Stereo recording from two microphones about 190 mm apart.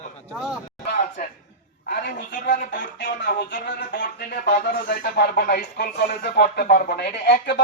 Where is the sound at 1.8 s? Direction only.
60° left (ahead or behind).